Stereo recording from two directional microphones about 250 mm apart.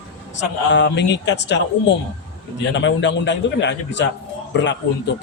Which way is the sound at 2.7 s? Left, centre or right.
Left.